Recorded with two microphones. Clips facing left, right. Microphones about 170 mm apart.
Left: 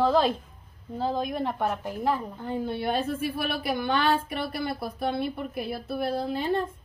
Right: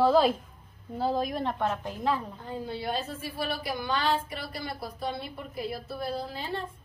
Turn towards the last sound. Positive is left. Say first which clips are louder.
# left 7 dB
turn(degrees=55)  # may be behind; listen again after turning